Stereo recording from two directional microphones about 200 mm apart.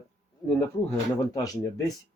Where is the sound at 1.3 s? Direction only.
15° left (ahead or behind).